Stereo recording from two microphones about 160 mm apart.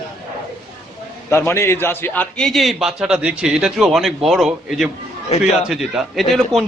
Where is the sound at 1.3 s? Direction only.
15° left (ahead or behind).